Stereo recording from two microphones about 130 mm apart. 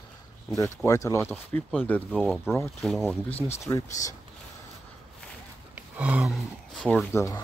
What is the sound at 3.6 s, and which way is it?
Speech, 25° left (ahead or behind).